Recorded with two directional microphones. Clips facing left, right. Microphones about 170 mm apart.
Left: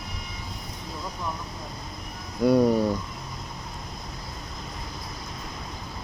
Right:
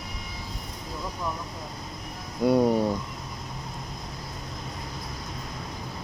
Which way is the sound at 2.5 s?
25° right (ahead or behind).